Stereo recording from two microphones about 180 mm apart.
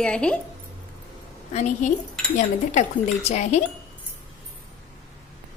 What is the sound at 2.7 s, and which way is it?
Speech, 40° left (ahead or behind).